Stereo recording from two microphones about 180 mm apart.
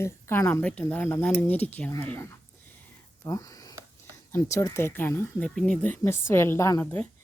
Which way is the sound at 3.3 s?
20° left (ahead or behind).